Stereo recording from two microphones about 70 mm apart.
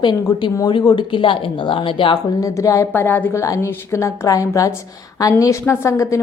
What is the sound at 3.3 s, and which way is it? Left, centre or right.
A woman's voice, left.